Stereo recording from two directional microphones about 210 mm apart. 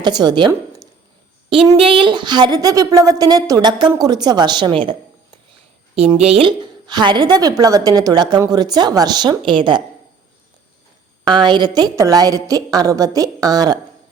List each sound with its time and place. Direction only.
0.0 s a woman's voice: 20° right (ahead or behind)
6.0 s a woman's voice: 30° right (ahead or behind)
11.3 s a woman's voice: 20° right (ahead or behind)